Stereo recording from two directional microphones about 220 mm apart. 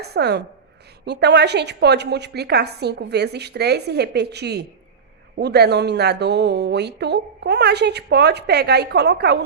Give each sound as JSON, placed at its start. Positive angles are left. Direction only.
{"t": 0.0, "sound": "a woman's voice", "side_deg": -50}